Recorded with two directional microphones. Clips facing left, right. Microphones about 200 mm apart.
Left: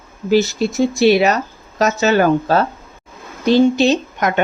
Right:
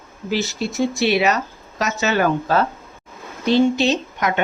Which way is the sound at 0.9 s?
40° left (ahead or behind).